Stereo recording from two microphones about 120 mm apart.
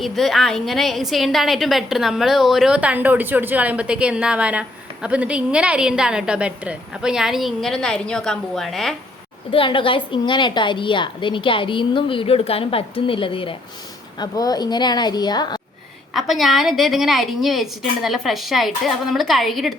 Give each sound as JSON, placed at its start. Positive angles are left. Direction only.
{"t": 0.0, "sound": "a woman's voice", "side_deg": 0}
{"t": 9.5, "sound": "a woman's voice", "side_deg": 45}
{"t": 14.2, "sound": "a woman's voice", "side_deg": 30}
{"t": 16.1, "sound": "a woman's voice", "side_deg": 0}